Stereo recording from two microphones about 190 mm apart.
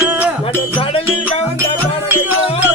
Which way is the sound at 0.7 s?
30° left (ahead or behind).